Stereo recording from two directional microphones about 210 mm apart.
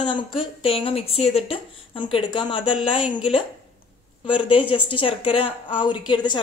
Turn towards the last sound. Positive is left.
turn(degrees=20)  # may be behind; listen again after turning